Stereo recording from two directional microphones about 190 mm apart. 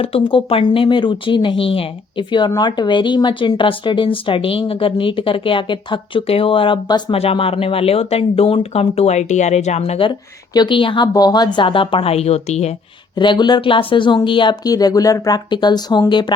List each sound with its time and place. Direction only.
0.0 s speech: 30° left (ahead or behind)
13.1 s speech: 25° left (ahead or behind)